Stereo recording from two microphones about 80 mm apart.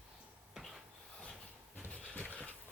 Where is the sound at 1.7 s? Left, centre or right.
Centre.